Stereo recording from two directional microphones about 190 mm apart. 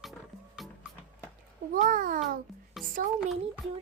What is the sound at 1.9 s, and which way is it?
Speech, 45° right (ahead or behind).